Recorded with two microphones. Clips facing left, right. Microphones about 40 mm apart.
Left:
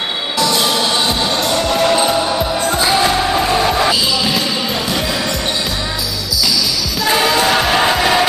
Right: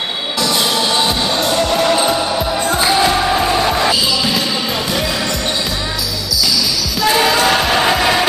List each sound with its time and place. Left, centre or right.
0.4 s music: centre
7.0 s music: centre